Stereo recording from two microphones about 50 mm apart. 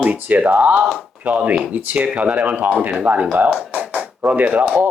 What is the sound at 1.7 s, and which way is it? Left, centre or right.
Speech, right.